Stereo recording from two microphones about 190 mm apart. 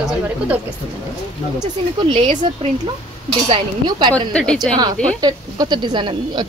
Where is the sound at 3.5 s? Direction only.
25° right (ahead or behind).